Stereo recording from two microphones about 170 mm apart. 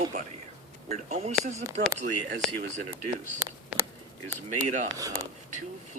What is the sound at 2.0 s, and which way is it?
Speech, 60° right (ahead or behind).